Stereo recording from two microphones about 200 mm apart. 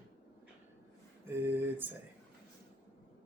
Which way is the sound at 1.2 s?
10° right (ahead or behind).